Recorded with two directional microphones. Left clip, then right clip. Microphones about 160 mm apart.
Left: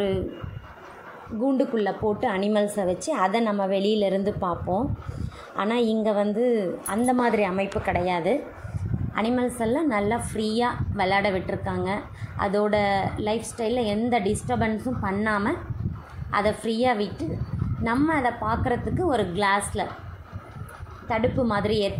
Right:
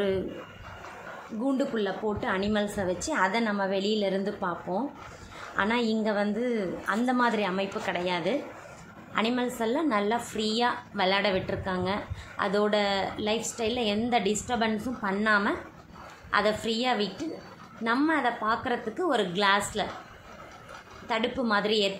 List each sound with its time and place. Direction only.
1.6 s a woman's voice: 25° left (ahead or behind)
5.6 s a woman's voice: 20° left (ahead or behind)
9.1 s a woman's voice: 10° left (ahead or behind)
21.1 s a woman's voice: 10° left (ahead or behind)